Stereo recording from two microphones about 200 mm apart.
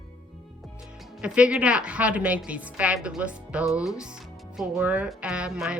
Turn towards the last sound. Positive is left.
turn(degrees=-5)  # may be behind; listen again after turning